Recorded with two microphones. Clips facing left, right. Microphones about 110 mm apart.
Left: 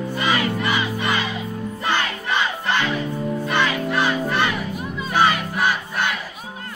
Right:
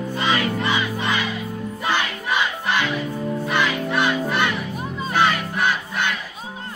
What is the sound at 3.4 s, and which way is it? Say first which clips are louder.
Music: left 1 dB; centre (ahead or behind).